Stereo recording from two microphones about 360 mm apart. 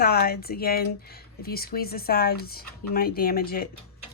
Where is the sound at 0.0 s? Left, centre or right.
Left.